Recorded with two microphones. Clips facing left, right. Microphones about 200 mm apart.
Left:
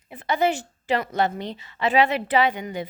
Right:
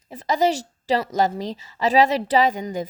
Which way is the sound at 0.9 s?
35° right (ahead or behind).